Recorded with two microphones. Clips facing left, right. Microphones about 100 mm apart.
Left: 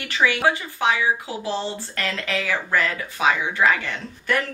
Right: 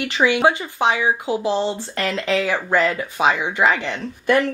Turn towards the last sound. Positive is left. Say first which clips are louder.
# right 6 dB
turn(degrees=-20)  # may be behind; listen again after turning